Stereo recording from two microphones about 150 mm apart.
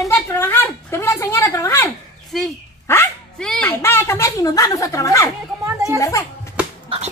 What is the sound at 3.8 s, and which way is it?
A woman's voice, 15° left (ahead or behind).